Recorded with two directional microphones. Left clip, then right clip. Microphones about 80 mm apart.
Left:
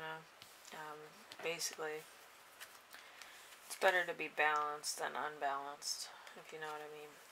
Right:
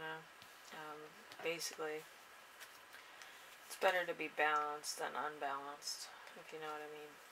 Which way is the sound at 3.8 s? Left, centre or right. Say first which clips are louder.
Left 2 dB; left.